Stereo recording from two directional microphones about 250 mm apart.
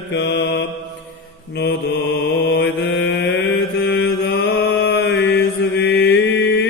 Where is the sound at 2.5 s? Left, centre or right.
Left.